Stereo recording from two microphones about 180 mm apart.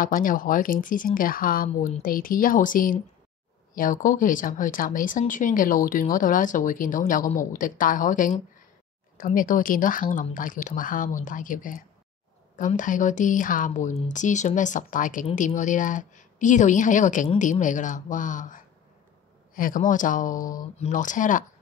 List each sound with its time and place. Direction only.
0.0 s speech: 50° left (ahead or behind)